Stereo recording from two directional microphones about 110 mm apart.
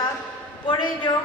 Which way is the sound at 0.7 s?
50° left (ahead or behind).